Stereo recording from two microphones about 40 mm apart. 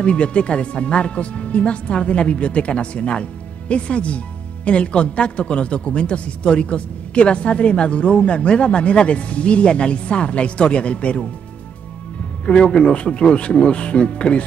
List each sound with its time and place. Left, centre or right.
0.0 s a man's voice: left
12.4 s a man's voice: left